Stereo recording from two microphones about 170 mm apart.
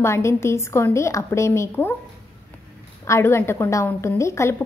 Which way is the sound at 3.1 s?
15° left (ahead or behind).